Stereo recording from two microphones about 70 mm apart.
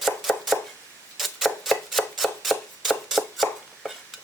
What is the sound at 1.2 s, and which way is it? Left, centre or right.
Chopping, centre.